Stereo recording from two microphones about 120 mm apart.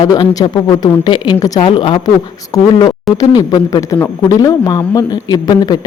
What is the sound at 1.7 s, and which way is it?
Speech, 45° left (ahead or behind).